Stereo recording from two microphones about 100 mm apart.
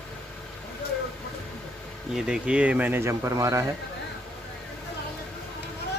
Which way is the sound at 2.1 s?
10° right (ahead or behind).